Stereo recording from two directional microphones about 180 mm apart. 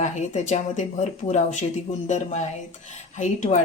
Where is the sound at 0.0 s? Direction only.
40° left (ahead or behind).